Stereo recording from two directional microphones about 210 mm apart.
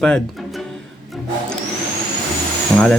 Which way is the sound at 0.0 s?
5° left (ahead or behind).